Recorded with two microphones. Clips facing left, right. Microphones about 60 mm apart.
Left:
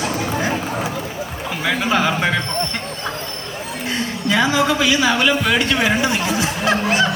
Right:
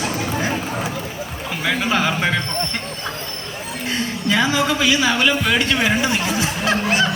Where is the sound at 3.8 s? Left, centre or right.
Centre.